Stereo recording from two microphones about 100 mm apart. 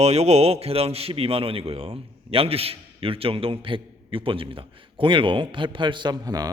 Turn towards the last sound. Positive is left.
turn(degrees=-40)  # may be behind; listen again after turning